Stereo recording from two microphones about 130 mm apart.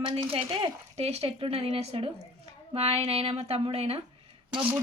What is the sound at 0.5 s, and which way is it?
A woman's voice, 50° right (ahead or behind).